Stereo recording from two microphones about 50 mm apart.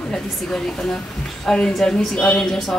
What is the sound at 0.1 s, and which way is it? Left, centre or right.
Speech, centre.